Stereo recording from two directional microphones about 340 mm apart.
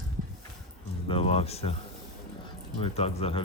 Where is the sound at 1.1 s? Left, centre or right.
Centre.